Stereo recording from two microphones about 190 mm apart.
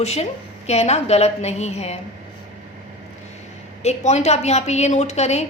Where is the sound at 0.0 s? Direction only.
35° left (ahead or behind).